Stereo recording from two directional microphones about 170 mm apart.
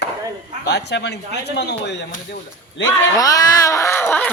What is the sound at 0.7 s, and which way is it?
Speech, 85° left.